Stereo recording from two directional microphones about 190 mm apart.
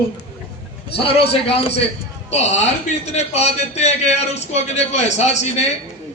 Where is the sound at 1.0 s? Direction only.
30° left (ahead or behind).